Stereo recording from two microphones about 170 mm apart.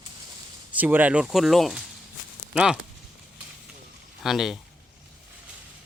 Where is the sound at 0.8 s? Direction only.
10° right (ahead or behind).